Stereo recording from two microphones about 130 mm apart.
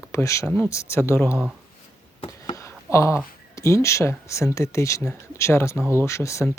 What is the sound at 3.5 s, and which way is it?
Speech, 25° left (ahead or behind).